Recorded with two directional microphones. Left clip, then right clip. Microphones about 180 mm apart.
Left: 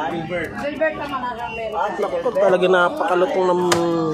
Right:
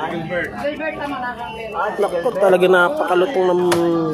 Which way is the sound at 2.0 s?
15° right (ahead or behind).